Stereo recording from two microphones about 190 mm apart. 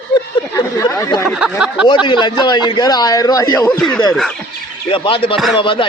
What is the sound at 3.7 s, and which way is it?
Speech, 5° left (ahead or behind).